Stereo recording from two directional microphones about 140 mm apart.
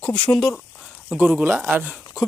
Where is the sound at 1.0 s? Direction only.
10° right (ahead or behind).